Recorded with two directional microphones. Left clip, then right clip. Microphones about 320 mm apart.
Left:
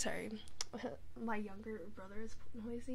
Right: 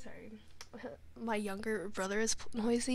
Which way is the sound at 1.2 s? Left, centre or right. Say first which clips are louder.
Right 7 dB; right.